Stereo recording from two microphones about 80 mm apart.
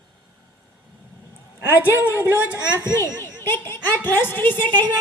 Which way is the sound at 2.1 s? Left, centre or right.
Right.